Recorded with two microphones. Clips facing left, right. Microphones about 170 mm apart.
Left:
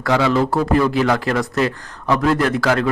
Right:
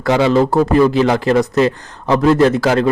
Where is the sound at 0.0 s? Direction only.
25° right (ahead or behind).